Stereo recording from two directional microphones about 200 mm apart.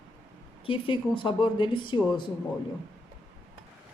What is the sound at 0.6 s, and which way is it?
Speech, 25° left (ahead or behind).